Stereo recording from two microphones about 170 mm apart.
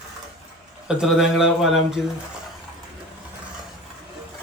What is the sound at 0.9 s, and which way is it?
Speech, 5° right (ahead or behind).